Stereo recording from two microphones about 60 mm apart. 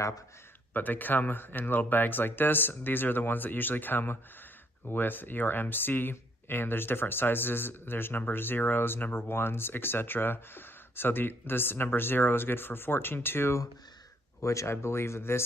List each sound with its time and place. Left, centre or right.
0.7 s speech: left
14.4 s speech: left